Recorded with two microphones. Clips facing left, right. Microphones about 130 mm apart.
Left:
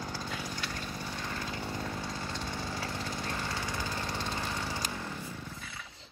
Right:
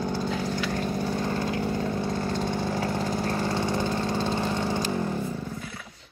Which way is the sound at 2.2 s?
50° right (ahead or behind).